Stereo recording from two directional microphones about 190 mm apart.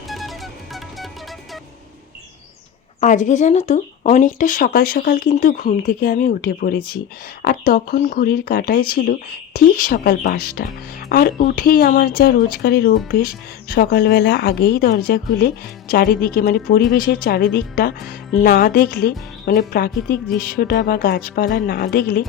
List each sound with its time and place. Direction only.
0.1 s music: centre (ahead or behind)
3.0 s speech: 40° left (ahead or behind)